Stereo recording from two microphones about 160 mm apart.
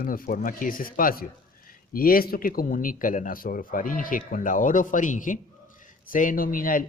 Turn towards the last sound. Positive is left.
turn(degrees=60)  # may be behind; listen again after turning